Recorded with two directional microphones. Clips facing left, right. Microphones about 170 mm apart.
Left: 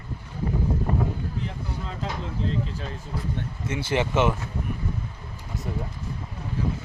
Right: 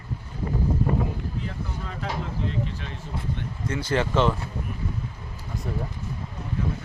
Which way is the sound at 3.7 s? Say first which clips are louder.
Even; 25° left (ahead or behind).